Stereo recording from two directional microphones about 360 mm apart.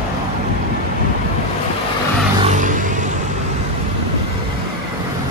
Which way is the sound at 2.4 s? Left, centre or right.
Right.